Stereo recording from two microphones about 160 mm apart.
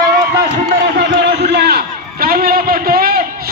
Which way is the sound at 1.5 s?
85° right.